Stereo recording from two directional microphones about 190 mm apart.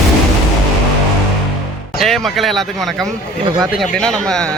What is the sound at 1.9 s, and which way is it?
Speech, centre (ahead or behind).